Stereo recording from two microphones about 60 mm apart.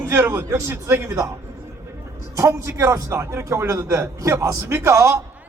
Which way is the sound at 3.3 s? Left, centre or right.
Right.